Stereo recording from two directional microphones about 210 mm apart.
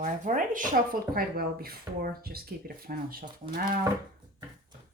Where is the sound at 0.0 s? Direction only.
40° right (ahead or behind).